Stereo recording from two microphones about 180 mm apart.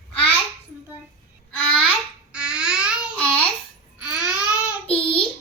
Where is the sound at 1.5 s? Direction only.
10° left (ahead or behind).